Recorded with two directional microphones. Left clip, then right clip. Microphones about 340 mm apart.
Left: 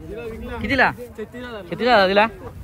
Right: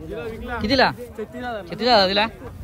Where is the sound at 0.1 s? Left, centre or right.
Centre.